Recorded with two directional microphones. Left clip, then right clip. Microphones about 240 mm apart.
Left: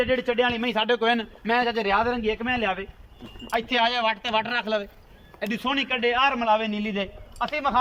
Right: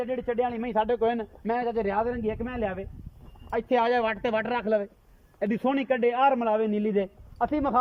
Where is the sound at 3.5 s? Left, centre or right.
Right.